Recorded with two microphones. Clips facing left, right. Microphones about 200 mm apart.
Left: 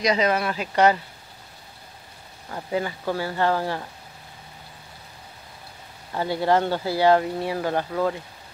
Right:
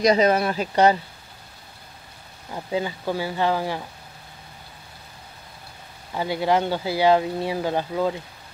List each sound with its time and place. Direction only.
0.0 s speech: 40° right (ahead or behind)
2.5 s speech: 15° right (ahead or behind)
6.1 s speech: 15° right (ahead or behind)